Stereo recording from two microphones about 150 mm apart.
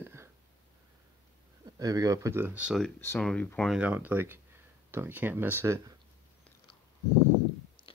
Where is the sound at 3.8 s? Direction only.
10° right (ahead or behind).